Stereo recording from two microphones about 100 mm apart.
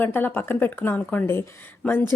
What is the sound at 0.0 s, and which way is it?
A woman's voice, 20° left (ahead or behind).